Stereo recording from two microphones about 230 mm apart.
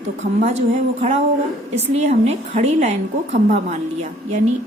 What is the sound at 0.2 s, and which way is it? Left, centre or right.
A woman's voice, right.